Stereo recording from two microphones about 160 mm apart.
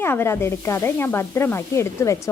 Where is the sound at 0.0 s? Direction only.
15° left (ahead or behind).